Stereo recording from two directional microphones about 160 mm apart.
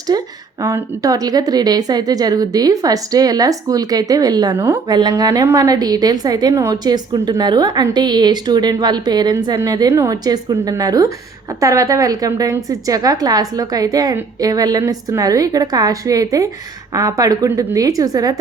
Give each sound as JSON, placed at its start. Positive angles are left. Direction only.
{"t": 0.1, "sound": "a woman's voice", "side_deg": -25}